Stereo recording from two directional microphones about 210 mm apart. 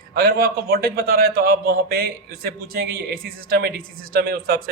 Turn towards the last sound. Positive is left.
turn(degrees=-45)  # may be behind; listen again after turning